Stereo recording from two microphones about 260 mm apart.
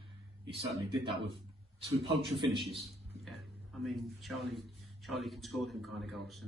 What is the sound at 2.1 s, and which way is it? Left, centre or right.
Speech, centre.